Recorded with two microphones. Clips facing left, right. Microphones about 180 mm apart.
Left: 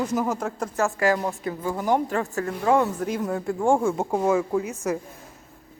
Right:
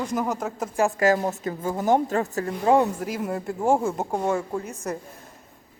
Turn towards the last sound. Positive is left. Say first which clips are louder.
# left 5 dB
turn(degrees=5)  # may be behind; listen again after turning